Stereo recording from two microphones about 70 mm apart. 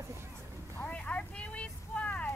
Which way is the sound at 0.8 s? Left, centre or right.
Centre.